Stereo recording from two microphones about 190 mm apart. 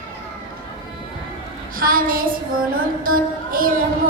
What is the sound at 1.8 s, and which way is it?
Child singing, 50° right (ahead or behind).